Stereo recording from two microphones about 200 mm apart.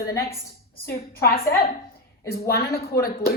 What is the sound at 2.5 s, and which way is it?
Speech, 50° left (ahead or behind).